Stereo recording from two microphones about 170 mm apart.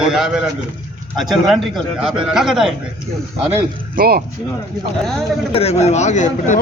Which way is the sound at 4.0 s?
60° right (ahead or behind).